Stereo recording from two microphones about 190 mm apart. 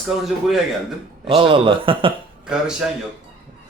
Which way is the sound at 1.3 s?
30° right (ahead or behind).